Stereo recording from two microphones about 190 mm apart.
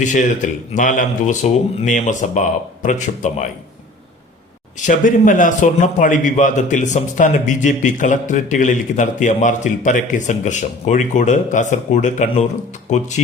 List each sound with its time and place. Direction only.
0.0 s a man's voice: 40° left (ahead or behind)
4.8 s a man's voice: 45° left (ahead or behind)